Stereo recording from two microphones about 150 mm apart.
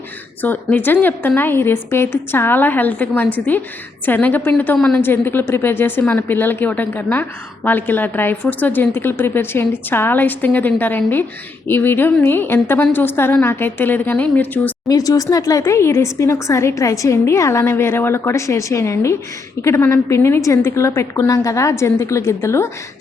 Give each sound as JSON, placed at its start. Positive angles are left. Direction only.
{"t": 0.4, "sound": "a woman's voice", "side_deg": 10}
{"t": 14.8, "sound": "speech", "side_deg": 25}